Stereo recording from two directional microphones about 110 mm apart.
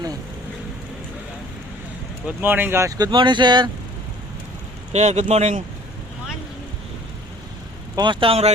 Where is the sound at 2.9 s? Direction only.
40° right (ahead or behind).